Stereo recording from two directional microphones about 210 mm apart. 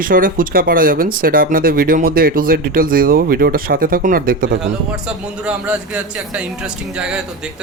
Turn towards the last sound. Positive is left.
turn(degrees=-5)  # may be behind; listen again after turning